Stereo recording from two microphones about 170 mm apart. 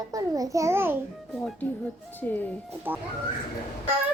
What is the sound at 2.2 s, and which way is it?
Speech, 10° left (ahead or behind).